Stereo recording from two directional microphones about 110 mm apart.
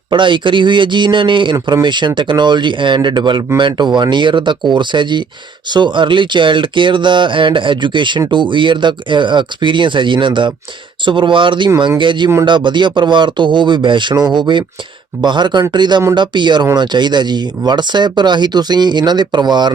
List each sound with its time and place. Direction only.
0.1 s speech: 45° right (ahead or behind)